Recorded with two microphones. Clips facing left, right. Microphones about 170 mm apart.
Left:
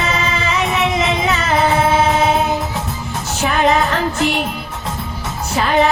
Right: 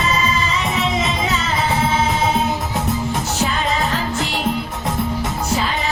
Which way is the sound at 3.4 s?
65° left (ahead or behind).